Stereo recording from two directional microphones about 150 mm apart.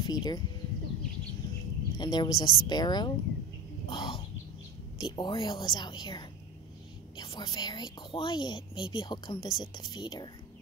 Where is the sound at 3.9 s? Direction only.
35° left (ahead or behind).